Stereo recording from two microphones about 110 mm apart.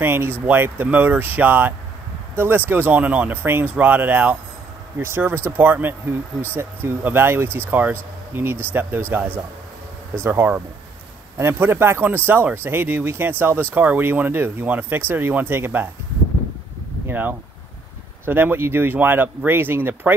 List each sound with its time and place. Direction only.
0.0 s speech: 20° right (ahead or behind)
17.1 s speech: 20° right (ahead or behind)